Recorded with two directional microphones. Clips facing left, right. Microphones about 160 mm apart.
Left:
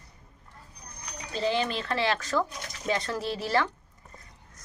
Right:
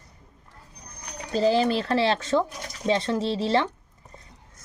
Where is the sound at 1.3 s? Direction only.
40° right (ahead or behind).